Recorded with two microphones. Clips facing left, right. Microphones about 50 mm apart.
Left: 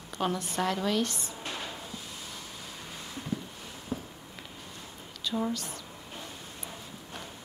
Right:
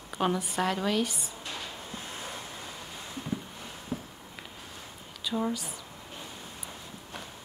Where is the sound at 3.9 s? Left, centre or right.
Right.